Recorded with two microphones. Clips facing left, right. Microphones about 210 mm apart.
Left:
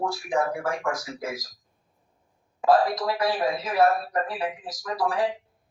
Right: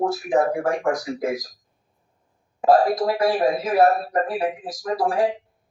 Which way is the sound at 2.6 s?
25° right (ahead or behind).